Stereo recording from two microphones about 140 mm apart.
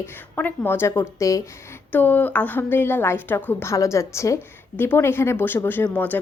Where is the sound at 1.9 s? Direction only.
10° left (ahead or behind).